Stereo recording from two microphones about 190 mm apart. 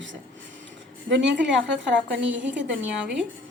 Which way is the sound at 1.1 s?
65° right (ahead or behind).